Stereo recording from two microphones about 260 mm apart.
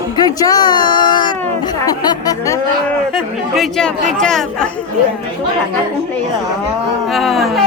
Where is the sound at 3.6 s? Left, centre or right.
Centre.